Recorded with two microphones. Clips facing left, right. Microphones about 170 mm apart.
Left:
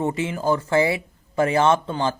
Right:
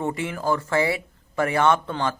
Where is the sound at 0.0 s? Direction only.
20° left (ahead or behind).